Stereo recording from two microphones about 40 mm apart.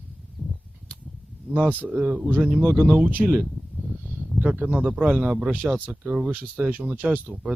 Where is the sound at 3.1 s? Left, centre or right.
Right.